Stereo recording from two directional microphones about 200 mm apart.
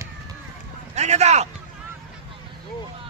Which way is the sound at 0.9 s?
35° right (ahead or behind).